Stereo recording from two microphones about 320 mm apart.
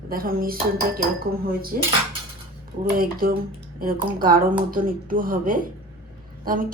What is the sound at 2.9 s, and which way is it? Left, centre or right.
A woman's voice, right.